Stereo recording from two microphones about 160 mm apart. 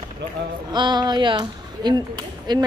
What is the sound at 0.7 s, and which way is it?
Speech, 30° right (ahead or behind).